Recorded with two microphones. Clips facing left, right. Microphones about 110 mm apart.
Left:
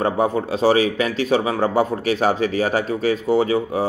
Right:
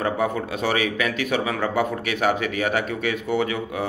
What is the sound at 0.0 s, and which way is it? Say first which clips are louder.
A man's voice: left 4 dB; 35° left (ahead or behind).